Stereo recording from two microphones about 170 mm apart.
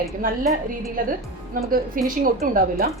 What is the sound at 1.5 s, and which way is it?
A woman's voice, 55° right (ahead or behind).